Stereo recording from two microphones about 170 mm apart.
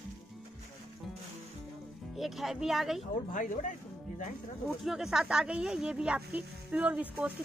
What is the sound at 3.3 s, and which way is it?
Speech, 50° left (ahead or behind).